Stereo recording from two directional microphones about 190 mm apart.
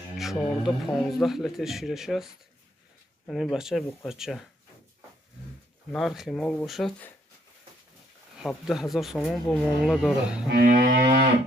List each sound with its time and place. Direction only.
0.2 s speech: centre (ahead or behind)
5.9 s speech: centre (ahead or behind)
8.4 s speech: centre (ahead or behind)
10.6 s livestock: 55° right (ahead or behind)